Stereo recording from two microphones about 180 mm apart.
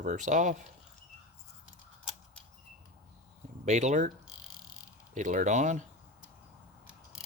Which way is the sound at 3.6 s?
40° right (ahead or behind).